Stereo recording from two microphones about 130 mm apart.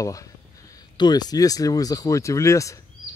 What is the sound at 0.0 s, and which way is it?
Speech, 25° left (ahead or behind).